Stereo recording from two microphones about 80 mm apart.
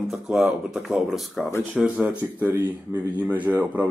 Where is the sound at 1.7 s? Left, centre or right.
Centre.